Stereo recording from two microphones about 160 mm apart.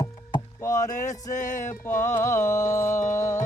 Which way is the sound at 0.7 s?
50° left (ahead or behind).